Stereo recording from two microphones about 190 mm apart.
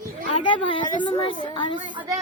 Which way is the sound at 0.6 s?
25° left (ahead or behind).